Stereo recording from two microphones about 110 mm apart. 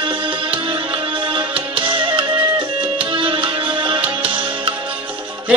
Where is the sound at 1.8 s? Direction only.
50° right (ahead or behind).